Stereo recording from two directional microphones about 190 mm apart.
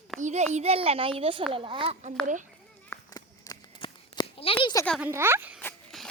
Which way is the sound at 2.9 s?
20° left (ahead or behind).